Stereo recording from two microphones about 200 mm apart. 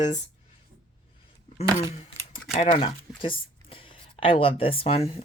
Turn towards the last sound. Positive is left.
turn(degrees=30)  # may be behind; listen again after turning